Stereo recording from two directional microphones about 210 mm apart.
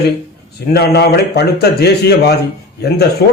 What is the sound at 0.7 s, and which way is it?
A man's voice, 50° left (ahead or behind).